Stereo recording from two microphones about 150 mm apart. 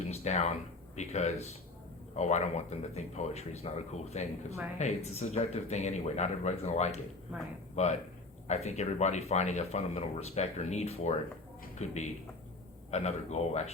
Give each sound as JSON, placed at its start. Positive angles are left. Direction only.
{"t": 0.1, "sound": "speech", "side_deg": 45}